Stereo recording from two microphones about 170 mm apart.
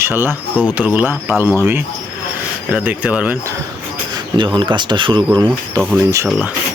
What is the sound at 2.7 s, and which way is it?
Speech, 10° right (ahead or behind).